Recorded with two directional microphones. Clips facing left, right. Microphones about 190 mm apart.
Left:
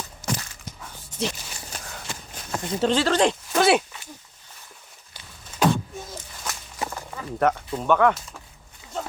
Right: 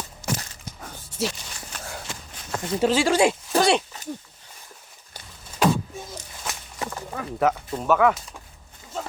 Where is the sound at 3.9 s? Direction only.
40° right (ahead or behind).